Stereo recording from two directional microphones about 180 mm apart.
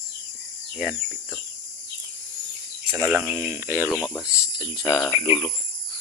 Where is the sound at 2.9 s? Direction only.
15° right (ahead or behind).